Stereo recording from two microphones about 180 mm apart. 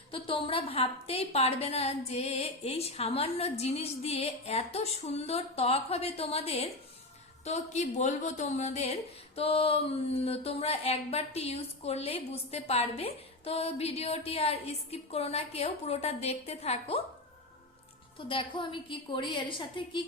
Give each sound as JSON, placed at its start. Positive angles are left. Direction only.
{"t": 0.1, "sound": "a woman's voice", "side_deg": 30}
{"t": 18.3, "sound": "a woman's voice", "side_deg": 30}